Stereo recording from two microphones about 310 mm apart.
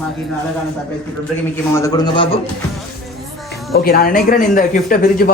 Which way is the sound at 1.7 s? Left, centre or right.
Centre.